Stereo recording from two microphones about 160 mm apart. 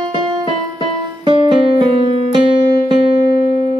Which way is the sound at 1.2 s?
30° right (ahead or behind).